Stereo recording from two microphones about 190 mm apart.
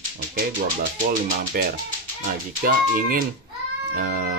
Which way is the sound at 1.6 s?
50° right (ahead or behind).